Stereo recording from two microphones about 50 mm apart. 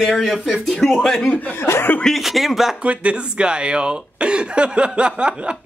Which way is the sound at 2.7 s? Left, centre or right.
Right.